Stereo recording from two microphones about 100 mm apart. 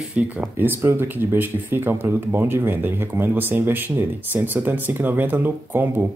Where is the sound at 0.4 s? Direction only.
20° right (ahead or behind).